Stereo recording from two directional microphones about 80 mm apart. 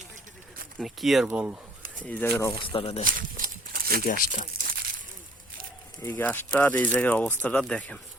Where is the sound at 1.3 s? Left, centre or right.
Centre.